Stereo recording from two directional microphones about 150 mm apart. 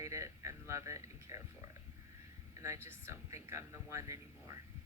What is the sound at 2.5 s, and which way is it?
Speech, 20° right (ahead or behind).